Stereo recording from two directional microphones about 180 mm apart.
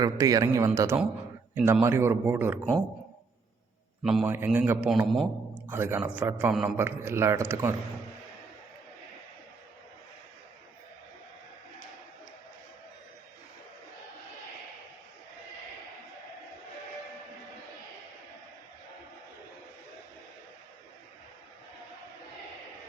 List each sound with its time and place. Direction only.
0.0 s a man's voice: 20° right (ahead or behind)
4.0 s a man's voice: 5° right (ahead or behind)
5.6 s a man's voice: 10° right (ahead or behind)